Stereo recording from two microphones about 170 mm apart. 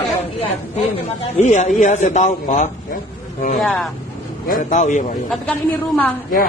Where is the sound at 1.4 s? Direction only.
45° left (ahead or behind).